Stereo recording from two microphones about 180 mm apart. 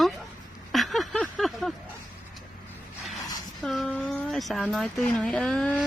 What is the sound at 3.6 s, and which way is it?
Speech, centre (ahead or behind).